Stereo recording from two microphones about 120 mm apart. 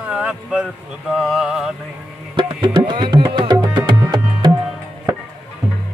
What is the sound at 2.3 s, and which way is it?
Music, 40° right (ahead or behind).